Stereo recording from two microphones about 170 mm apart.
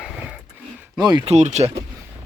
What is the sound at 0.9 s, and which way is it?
Speech, 25° right (ahead or behind).